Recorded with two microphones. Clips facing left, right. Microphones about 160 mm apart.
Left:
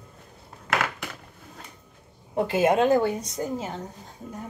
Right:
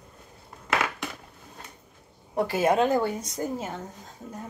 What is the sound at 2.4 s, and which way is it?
Speech, 20° left (ahead or behind).